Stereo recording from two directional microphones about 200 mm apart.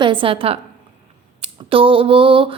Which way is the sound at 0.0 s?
25° right (ahead or behind).